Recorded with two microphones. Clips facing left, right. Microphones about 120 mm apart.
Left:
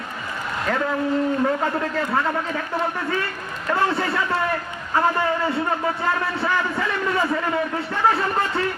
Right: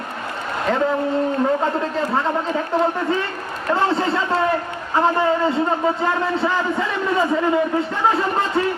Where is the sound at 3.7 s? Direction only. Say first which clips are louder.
Right 3 dB; 25° right (ahead or behind).